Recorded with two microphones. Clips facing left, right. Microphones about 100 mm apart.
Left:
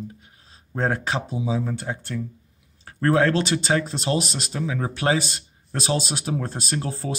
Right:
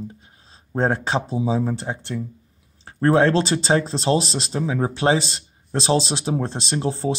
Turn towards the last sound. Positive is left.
turn(degrees=-25)  # may be behind; listen again after turning